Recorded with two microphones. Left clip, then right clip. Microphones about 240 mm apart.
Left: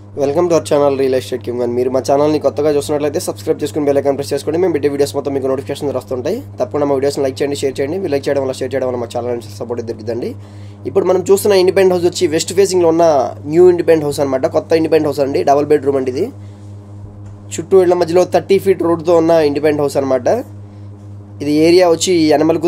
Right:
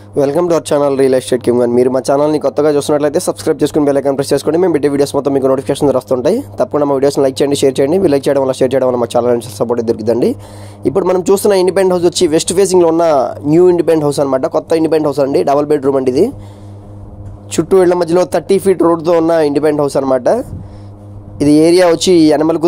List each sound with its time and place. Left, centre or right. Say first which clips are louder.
0.2 s speech: right 1 dB; right
17.5 s speech: right 1 dB; right